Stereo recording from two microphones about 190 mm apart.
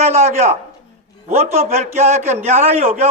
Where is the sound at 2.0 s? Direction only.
35° right (ahead or behind).